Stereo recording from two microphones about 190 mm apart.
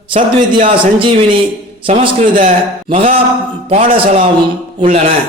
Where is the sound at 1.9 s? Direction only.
35° right (ahead or behind).